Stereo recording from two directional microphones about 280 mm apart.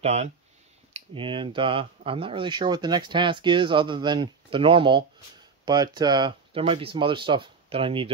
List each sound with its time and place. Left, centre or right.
0.0 s speech: right